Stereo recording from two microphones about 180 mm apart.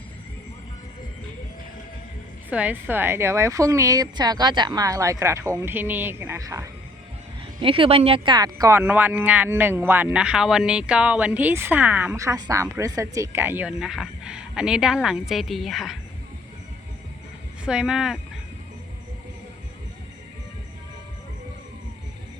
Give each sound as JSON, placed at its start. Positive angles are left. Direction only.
{"t": 2.5, "sound": "speech", "side_deg": -10}
{"t": 7.6, "sound": "speech", "side_deg": -30}
{"t": 17.7, "sound": "speech", "side_deg": -5}